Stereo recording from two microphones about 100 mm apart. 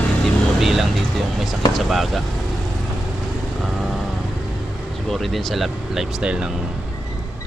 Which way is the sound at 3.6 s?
Centre (ahead or behind).